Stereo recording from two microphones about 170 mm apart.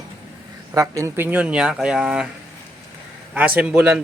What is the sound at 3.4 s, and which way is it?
Speech, 5° right (ahead or behind).